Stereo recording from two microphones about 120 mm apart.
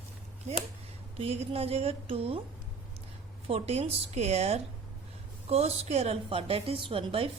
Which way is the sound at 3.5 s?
60° right (ahead or behind).